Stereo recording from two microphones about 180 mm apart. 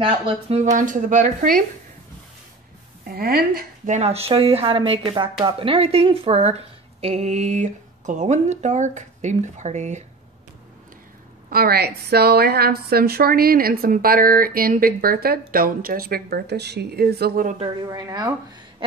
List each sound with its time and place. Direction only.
0.0 s speech: 35° right (ahead or behind)
0.7 s speech: 45° right (ahead or behind)
3.1 s speech: 55° right (ahead or behind)
11.5 s a woman's voice: 60° right (ahead or behind)
17.8 s speech: 20° right (ahead or behind)
18.8 s a sound: 30° right (ahead or behind)